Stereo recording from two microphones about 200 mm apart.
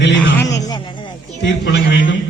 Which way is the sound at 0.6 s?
20° left (ahead or behind).